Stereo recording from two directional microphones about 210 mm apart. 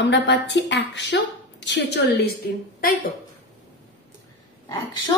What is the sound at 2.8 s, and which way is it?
Speech, 45° left (ahead or behind).